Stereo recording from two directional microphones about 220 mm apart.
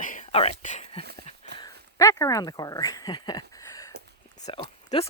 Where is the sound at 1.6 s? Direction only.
15° left (ahead or behind).